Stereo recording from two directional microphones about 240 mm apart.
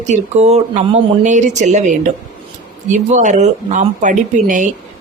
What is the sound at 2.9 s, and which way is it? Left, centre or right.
Speech, right.